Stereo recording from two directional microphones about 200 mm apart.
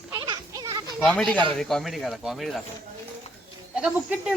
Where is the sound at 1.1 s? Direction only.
5° left (ahead or behind).